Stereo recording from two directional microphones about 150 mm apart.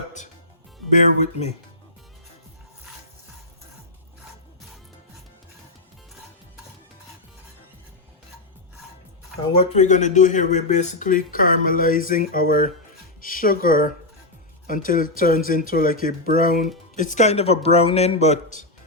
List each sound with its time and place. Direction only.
1.2 s speech: 45° left (ahead or behind)
9.5 s speech: 45° left (ahead or behind)